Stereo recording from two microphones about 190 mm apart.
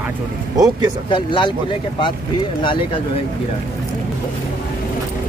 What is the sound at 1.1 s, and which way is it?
Speech, 25° left (ahead or behind).